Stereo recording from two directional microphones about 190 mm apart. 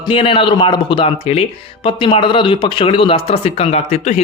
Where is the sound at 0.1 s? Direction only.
25° left (ahead or behind).